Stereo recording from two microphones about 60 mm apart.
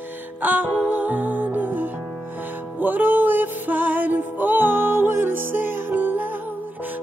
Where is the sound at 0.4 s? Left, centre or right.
Right.